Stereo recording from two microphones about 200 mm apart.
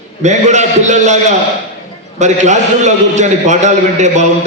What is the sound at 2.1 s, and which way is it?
A man's voice, 35° right (ahead or behind).